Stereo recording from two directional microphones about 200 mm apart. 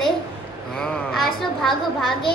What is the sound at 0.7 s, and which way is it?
Speech, centre (ahead or behind).